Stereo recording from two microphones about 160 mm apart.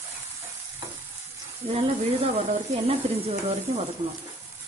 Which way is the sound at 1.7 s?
40° right (ahead or behind).